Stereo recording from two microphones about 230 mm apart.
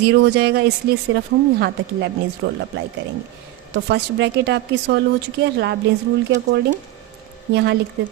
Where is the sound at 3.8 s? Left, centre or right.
Right.